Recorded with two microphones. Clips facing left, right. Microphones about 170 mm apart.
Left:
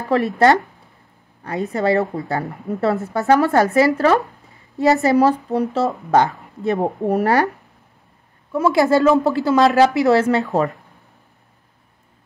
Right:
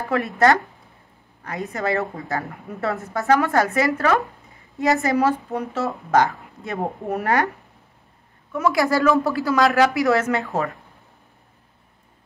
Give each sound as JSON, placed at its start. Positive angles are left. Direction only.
{"t": 0.1, "sound": "speech", "side_deg": 30}